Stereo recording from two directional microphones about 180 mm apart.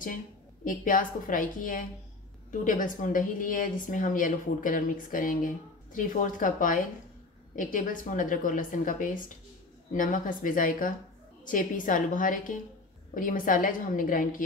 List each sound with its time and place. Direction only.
0.7 s a woman's voice: 50° left (ahead or behind)